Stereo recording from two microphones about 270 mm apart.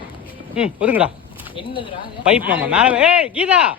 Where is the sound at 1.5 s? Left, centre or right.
Centre.